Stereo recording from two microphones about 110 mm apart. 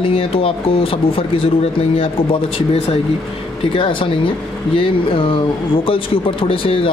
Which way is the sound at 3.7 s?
50° left (ahead or behind).